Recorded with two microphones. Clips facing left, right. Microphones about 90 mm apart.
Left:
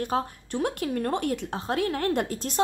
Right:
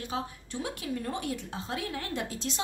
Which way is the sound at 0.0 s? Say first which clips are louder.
Left 7 dB; 50° left (ahead or behind).